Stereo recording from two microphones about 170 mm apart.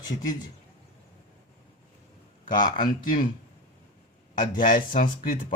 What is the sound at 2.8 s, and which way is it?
Speech, 55° left (ahead or behind).